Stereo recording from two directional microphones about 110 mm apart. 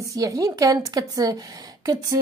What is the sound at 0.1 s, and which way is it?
A woman's voice, 30° right (ahead or behind).